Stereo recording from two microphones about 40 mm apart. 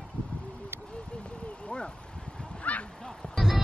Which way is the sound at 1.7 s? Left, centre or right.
Left.